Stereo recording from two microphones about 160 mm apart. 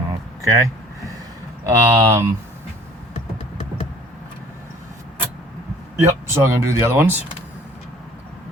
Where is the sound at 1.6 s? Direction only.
20° right (ahead or behind).